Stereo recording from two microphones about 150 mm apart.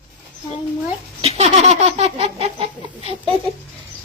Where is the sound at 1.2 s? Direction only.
45° right (ahead or behind).